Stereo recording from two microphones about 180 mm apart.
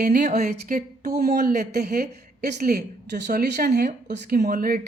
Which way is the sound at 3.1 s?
70° right (ahead or behind).